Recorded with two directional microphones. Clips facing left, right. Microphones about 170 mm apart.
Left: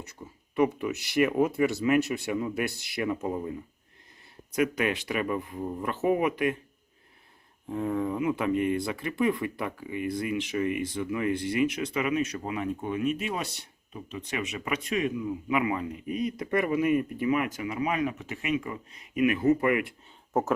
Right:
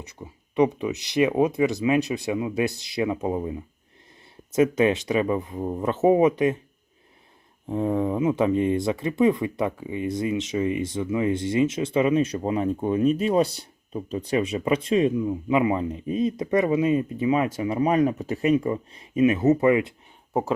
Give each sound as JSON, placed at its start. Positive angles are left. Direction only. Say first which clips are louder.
{"t": 0.5, "sound": "speech", "louder": "right 4 dB", "side_deg": -20}
{"t": 4.5, "sound": "speech", "louder": "right 7 dB", "side_deg": -25}
{"t": 7.7, "sound": "speech", "louder": "right 5 dB", "side_deg": -20}